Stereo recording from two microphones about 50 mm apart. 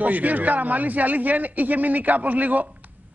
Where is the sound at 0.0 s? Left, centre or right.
Right.